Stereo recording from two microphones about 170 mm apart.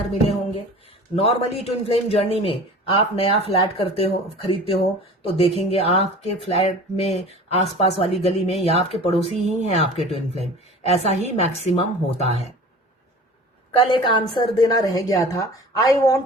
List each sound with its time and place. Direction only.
0.1 s speech: 40° left (ahead or behind)
13.7 s a woman's voice: 30° left (ahead or behind)